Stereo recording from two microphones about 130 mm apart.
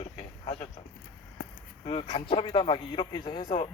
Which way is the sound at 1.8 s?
45° left (ahead or behind).